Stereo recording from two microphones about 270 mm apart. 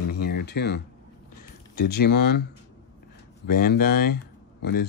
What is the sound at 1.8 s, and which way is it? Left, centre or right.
Speech, left.